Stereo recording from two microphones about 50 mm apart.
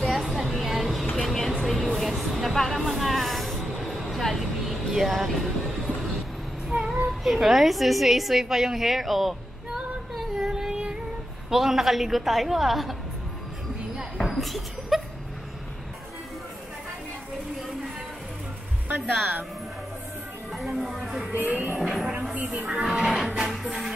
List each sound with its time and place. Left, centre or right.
0.0 s a sound: centre
1.1 s music: centre
2.0 s a sound: centre
6.7 s child singing: centre
7.3 s a woman's voice: centre
10.1 s a sound: centre
11.5 s a woman's voice: centre
14.2 s speech: centre
20.5 s speech: centre
21.3 s music: right
21.7 s music: centre
22.3 s speech: right
22.9 s music: centre